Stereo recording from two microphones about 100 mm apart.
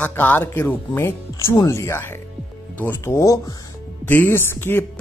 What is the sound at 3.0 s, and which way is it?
Speech, 30° left (ahead or behind).